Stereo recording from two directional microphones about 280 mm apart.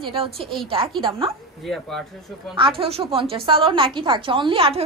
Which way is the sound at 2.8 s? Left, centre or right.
Centre.